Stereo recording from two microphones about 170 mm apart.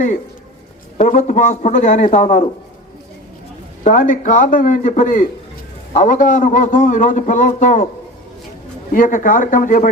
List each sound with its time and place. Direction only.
0.9 s a man's voice: 50° left (ahead or behind)
3.8 s a man's voice: 50° left (ahead or behind)
8.9 s a man's voice: 50° left (ahead or behind)